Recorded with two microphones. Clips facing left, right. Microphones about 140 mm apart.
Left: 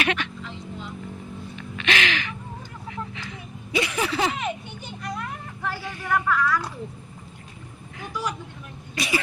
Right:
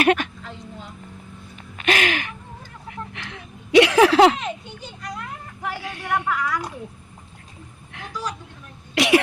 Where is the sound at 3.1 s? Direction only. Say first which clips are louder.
Even; 65° right (ahead or behind); by 4.4 s 80° right.